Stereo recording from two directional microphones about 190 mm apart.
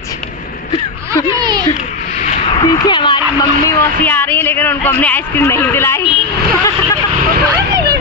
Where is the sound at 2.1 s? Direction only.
40° left (ahead or behind).